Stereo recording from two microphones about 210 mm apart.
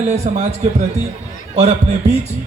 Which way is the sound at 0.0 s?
30° right (ahead or behind).